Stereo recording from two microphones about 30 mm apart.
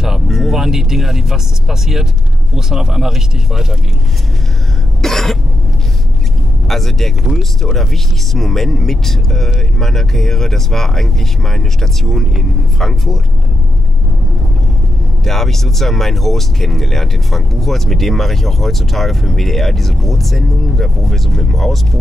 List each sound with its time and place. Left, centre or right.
0.3 s speech: centre
5.0 s speech: centre
6.7 s speech: centre
7.2 s speech: centre
7.7 s speech: centre
15.2 s speech: centre